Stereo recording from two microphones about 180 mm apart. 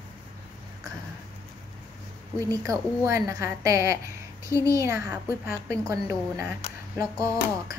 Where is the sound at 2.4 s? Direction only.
20° right (ahead or behind).